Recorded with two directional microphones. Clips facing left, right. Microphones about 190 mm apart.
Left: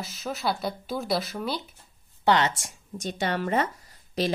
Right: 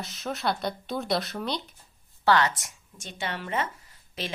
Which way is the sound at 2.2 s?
20° left (ahead or behind).